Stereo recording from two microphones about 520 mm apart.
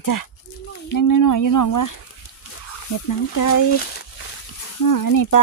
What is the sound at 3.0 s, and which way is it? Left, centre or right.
Speech, left.